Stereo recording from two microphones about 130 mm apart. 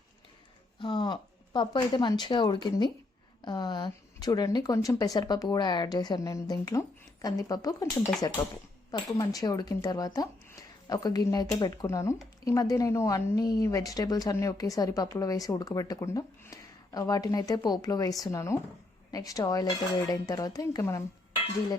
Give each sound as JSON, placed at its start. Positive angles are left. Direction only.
{"t": 0.8, "sound": "speech", "side_deg": 35}